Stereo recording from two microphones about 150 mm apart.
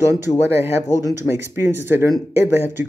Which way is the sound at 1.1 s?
15° right (ahead or behind).